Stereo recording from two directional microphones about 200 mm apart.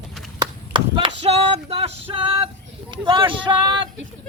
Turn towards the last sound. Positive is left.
turn(degrees=-25)  # may be behind; listen again after turning